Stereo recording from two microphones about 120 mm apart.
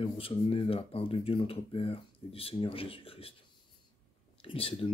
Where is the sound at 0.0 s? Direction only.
50° left (ahead or behind).